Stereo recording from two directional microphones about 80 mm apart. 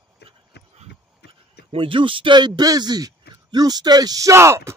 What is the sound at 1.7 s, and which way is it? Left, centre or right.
Speech, right.